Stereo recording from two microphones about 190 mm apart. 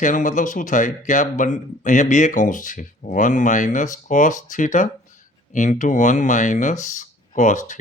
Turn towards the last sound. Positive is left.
turn(degrees=40)  # may be behind; listen again after turning